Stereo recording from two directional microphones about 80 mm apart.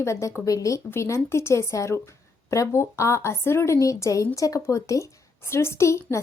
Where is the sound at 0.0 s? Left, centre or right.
Left.